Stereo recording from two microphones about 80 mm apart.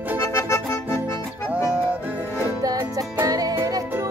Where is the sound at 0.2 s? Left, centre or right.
Left.